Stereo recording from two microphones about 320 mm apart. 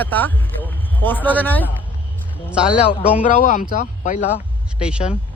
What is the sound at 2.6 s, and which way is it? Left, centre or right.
Speech, centre.